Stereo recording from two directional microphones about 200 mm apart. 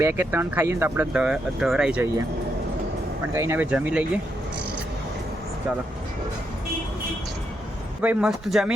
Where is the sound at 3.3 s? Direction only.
15° right (ahead or behind).